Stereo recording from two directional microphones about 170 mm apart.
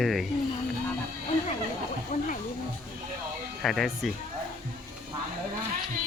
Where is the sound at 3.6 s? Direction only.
Centre (ahead or behind).